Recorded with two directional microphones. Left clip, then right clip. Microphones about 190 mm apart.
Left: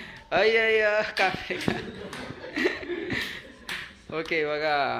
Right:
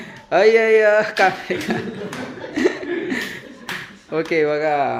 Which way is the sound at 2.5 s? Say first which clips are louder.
Right 7 dB; 10° right (ahead or behind).